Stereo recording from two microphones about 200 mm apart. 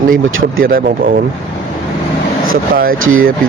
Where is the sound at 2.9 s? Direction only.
90° right.